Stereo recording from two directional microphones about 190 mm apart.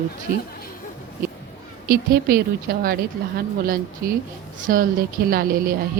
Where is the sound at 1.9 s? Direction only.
55° right (ahead or behind).